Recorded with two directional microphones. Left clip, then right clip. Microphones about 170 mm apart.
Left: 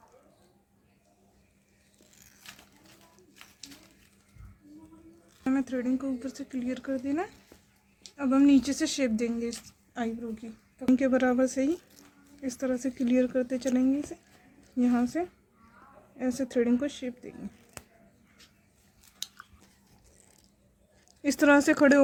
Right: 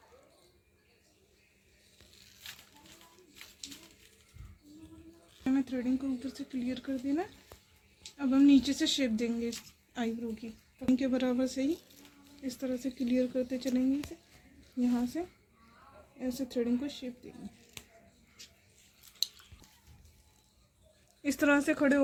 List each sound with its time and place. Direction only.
5.4 s a sound: 5° left (ahead or behind)
5.6 s speech: 5° left (ahead or behind)
10.9 s speech: 30° left (ahead or behind)
21.2 s speech: 25° left (ahead or behind)